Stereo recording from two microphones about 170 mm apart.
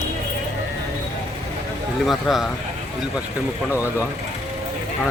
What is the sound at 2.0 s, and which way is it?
Speech, centre (ahead or behind).